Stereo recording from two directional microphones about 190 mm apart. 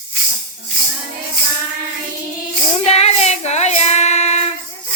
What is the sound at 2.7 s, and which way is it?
Child singing, 35° left (ahead or behind).